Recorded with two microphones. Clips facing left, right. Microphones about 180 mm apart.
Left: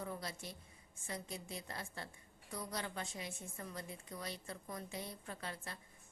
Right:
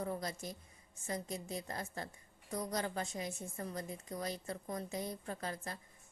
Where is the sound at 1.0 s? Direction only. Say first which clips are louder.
Right 5 dB; 40° right (ahead or behind).